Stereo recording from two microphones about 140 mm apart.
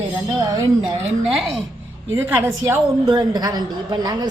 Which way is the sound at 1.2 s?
5° right (ahead or behind).